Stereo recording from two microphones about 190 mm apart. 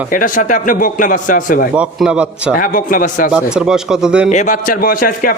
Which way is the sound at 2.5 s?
45° left (ahead or behind).